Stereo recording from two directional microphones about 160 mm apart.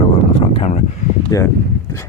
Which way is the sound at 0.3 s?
40° left (ahead or behind).